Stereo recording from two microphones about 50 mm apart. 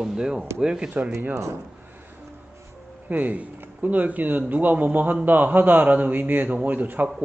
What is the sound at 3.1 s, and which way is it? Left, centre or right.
A man's voice, right.